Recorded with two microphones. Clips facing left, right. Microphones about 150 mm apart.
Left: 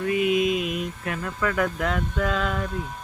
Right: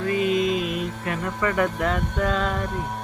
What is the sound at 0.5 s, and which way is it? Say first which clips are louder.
Mantra: right 1 dB; 40° right (ahead or behind).